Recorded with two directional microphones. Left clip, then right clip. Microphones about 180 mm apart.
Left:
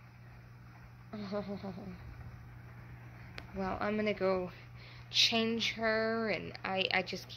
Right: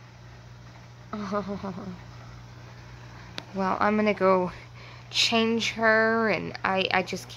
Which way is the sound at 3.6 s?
20° right (ahead or behind).